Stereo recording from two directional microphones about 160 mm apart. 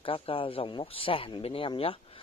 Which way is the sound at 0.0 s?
35° left (ahead or behind).